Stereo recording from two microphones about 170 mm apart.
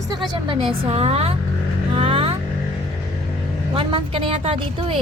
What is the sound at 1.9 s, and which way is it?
Vehicle, 35° right (ahead or behind).